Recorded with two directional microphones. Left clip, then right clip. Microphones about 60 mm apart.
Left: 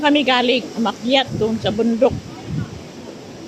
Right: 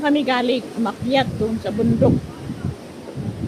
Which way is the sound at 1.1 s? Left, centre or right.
Centre.